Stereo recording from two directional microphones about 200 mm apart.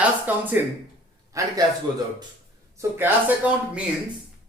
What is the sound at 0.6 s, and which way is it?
Speech, 10° right (ahead or behind).